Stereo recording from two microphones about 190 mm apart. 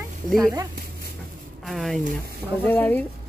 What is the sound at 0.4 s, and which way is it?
Speech, 20° right (ahead or behind).